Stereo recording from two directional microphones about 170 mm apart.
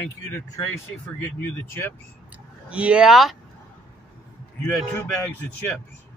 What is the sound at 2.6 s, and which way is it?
Speech, 5° right (ahead or behind).